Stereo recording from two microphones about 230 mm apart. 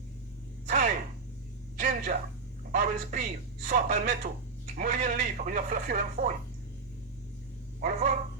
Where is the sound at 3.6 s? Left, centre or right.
Right.